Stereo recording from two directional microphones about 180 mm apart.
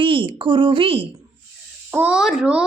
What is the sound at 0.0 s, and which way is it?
A woman's voice, 30° right (ahead or behind).